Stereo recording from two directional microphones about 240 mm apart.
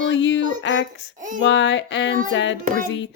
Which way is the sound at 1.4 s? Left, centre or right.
Left.